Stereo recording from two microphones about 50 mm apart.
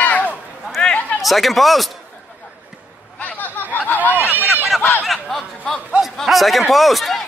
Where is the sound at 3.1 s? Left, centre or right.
Left.